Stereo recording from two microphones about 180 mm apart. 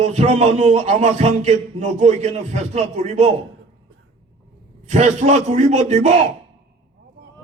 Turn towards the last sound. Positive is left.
turn(degrees=-40)  # may be behind; listen again after turning